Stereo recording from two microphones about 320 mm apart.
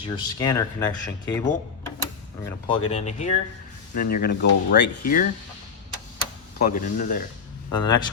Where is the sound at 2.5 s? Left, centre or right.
Centre.